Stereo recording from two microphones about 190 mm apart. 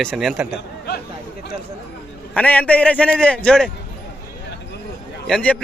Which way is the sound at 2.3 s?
10° left (ahead or behind).